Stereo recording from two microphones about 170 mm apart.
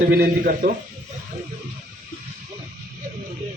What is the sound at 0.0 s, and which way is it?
Speech, 60° right (ahead or behind).